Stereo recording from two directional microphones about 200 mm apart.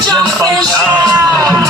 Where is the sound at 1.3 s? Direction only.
10° left (ahead or behind).